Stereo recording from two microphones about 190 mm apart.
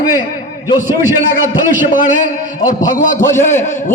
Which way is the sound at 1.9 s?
45° left (ahead or behind).